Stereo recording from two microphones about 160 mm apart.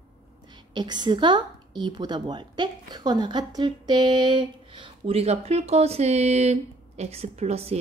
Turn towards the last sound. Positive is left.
turn(degrees=-40)  # may be behind; listen again after turning